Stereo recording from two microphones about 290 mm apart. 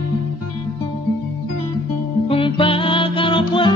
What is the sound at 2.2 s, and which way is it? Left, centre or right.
Music, centre.